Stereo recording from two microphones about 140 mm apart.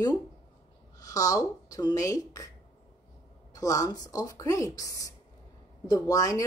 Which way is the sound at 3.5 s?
25° left (ahead or behind).